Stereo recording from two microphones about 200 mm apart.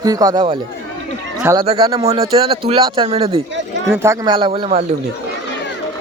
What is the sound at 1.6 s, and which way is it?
Speech, 30° right (ahead or behind).